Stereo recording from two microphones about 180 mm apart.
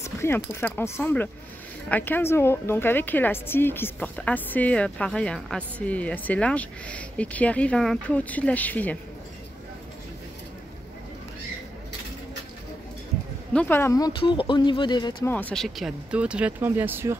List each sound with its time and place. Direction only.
0.0 s a sound: 15° left (ahead or behind)
0.6 s a woman's voice: 10° left (ahead or behind)
13.5 s speech: 10° left (ahead or behind); by 15.2 s 25° left (ahead or behind)
15.2 s speech: 10° left (ahead or behind); by 17.2 s 15° right (ahead or behind)